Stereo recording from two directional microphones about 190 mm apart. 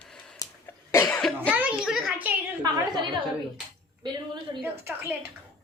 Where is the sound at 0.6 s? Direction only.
15° left (ahead or behind).